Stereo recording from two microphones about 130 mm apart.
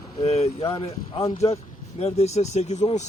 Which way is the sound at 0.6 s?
25° left (ahead or behind).